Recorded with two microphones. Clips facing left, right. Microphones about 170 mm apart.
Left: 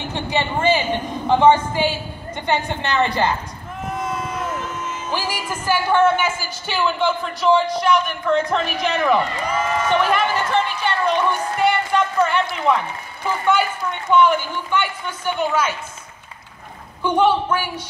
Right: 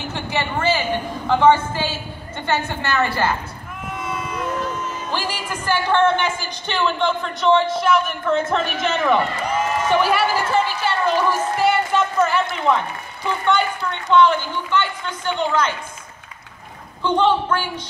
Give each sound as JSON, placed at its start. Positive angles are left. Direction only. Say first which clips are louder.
{"t": 0.1, "sound": "a woman's voice", "louder": "left 2 dB", "side_deg": 20}
{"t": 3.9, "sound": "a sound", "louder": "left 2 dB", "side_deg": 40}
{"t": 5.1, "sound": "a woman's voice", "louder": "left 2 dB", "side_deg": 10}
{"t": 17.0, "sound": "speech", "louder": "left 1 dB", "side_deg": 10}